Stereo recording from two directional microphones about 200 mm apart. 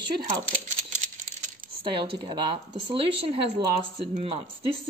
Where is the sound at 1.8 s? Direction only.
25° right (ahead or behind).